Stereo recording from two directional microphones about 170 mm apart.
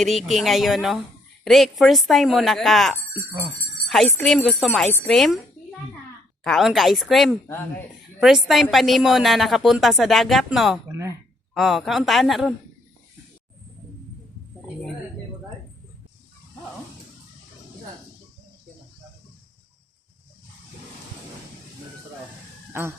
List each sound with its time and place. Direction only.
0.0 s speech: centre (ahead or behind)
6.4 s speech: centre (ahead or behind)
10.9 s speech: 20° right (ahead or behind)
11.5 s speech: centre (ahead or behind)
22.7 s speech: 15° right (ahead or behind)